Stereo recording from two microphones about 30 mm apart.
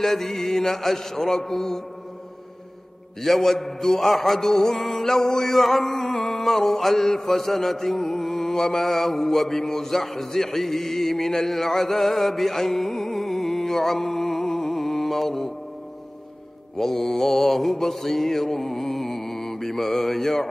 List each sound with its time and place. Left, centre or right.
0.0 s mantra: centre
3.2 s a sound: centre
16.7 s mantra: centre